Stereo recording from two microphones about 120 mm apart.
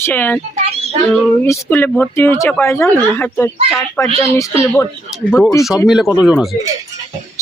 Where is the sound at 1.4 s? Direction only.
20° left (ahead or behind).